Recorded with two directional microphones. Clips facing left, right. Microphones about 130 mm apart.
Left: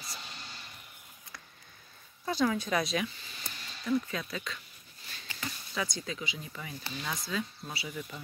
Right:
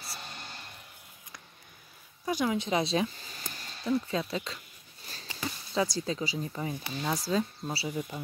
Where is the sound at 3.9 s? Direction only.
30° right (ahead or behind).